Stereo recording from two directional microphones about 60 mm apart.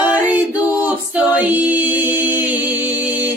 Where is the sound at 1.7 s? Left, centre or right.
Right.